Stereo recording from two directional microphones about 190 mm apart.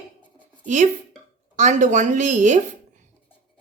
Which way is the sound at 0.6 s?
40° right (ahead or behind).